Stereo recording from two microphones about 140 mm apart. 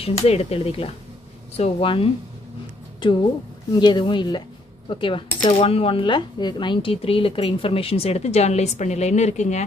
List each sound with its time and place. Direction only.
0.0 s speech: 45° left (ahead or behind)